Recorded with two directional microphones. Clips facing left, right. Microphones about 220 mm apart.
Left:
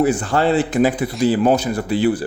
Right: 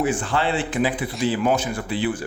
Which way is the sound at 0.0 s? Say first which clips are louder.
Left 6 dB; 40° left (ahead or behind).